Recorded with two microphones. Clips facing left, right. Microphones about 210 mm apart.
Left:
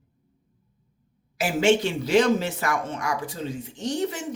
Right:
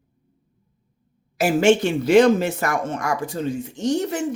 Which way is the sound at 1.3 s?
45° right (ahead or behind).